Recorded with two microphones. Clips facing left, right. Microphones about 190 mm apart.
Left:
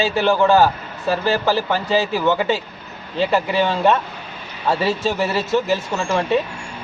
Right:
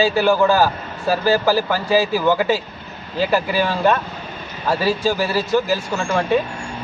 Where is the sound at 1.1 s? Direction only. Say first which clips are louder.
Right 2 dB; 5° right (ahead or behind).